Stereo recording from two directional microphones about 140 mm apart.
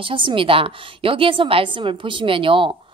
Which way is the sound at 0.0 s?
40° right (ahead or behind).